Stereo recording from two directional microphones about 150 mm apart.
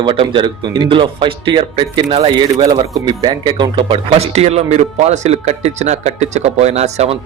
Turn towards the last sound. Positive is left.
turn(degrees=-45)  # may be behind; listen again after turning